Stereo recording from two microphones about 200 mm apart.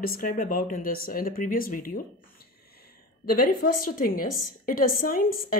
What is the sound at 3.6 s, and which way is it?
Speech, 50° left (ahead or behind).